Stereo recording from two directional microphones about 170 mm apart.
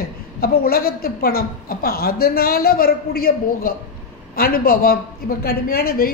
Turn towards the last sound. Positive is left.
turn(degrees=65)  # may be behind; listen again after turning